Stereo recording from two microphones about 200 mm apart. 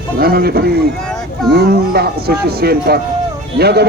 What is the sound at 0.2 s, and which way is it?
Speech, 50° right (ahead or behind).